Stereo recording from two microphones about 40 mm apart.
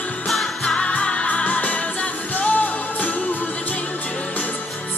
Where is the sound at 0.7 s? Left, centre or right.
Left.